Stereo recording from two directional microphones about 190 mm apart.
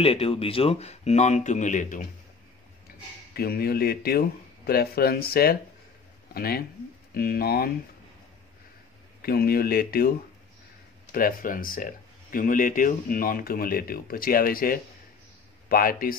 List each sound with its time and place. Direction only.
0.0 s speech: 30° left (ahead or behind)
2.9 s a sound: 50° left (ahead or behind)
3.3 s speech: 55° left (ahead or behind)
9.2 s speech: 50° left (ahead or behind)